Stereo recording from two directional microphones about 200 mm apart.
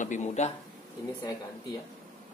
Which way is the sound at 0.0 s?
35° left (ahead or behind).